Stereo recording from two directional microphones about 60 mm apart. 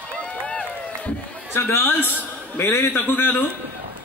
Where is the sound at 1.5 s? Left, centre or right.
Left.